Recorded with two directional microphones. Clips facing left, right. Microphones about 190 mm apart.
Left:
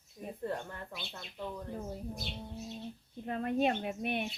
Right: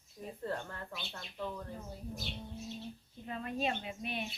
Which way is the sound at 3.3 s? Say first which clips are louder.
Left 6 dB; 55° left (ahead or behind).